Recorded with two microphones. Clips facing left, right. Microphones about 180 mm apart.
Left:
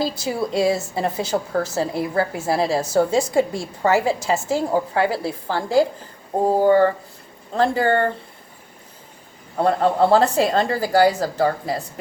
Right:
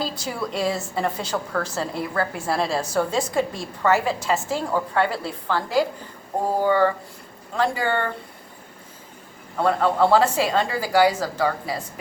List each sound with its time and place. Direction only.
0.6 s a woman's voice: 25° left (ahead or behind)
6.6 s speech: 45° left (ahead or behind)
9.6 s a woman's voice: 40° left (ahead or behind)